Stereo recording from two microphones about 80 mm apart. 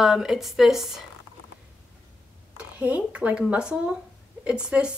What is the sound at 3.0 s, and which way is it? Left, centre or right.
Speech, centre.